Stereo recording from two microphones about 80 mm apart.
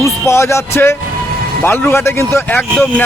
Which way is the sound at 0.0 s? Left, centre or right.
Left.